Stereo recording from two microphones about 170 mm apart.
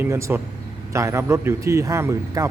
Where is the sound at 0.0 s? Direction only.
15° right (ahead or behind).